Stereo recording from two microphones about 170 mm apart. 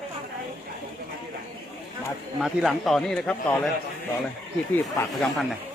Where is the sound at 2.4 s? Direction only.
Centre (ahead or behind).